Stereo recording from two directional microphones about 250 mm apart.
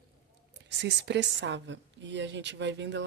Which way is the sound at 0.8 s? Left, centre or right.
Right.